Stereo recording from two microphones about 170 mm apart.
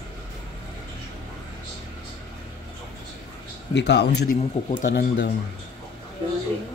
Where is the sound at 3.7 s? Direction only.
90° left.